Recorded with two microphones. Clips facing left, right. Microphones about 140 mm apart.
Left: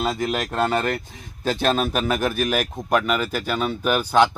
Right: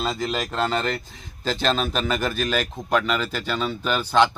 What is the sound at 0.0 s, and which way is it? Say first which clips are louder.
Speech: left 2 dB; 10° left (ahead or behind).